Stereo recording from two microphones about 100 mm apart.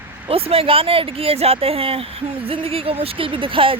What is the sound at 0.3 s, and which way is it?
Speech, 75° right (ahead or behind).